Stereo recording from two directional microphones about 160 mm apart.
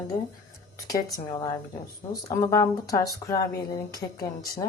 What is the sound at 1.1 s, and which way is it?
Speech, 25° left (ahead or behind).